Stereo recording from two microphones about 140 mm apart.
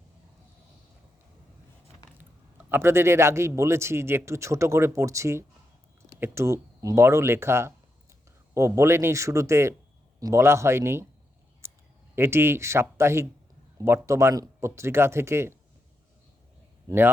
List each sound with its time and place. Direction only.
2.1 s a man's voice: 15° right (ahead or behind)
11.6 s clicking: 20° right (ahead or behind)
12.1 s a man's voice: 15° right (ahead or behind)